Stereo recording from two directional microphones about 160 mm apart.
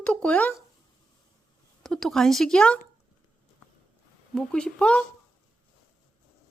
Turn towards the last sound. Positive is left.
turn(degrees=5)  # may be behind; listen again after turning